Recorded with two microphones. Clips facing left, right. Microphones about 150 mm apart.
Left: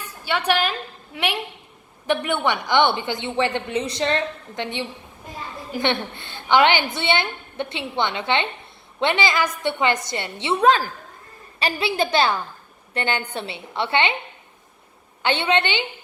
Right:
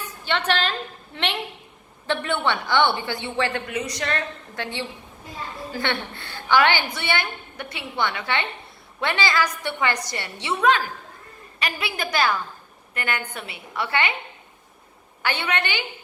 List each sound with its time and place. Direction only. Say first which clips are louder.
0.3 s a woman's voice: left 2 dB; 10° left (ahead or behind)
15.2 s a woman's voice: left 5 dB; 25° left (ahead or behind)